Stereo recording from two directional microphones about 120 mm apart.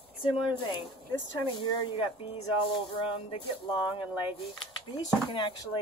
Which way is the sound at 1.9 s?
50° left (ahead or behind).